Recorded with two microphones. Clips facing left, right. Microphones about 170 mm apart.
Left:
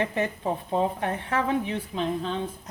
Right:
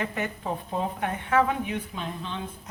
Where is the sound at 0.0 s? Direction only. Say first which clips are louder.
Left 4 dB; 25° left (ahead or behind).